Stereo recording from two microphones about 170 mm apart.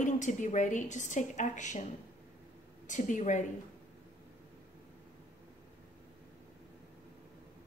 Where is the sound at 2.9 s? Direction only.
45° left (ahead or behind).